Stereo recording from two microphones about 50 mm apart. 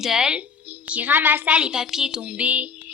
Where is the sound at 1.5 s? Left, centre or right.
Centre.